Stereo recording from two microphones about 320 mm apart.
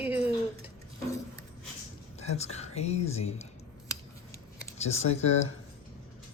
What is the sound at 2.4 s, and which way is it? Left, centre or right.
Speech, centre.